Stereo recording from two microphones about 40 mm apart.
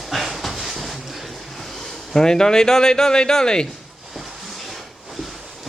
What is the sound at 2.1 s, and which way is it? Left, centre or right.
Speech, centre.